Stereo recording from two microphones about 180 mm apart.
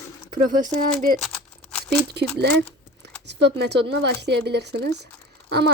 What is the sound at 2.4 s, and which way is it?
Speech, 65° right (ahead or behind).